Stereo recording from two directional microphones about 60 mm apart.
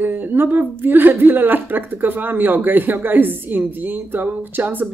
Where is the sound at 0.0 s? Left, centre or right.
Right.